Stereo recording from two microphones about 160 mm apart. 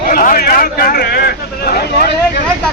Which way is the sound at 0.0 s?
60° left (ahead or behind).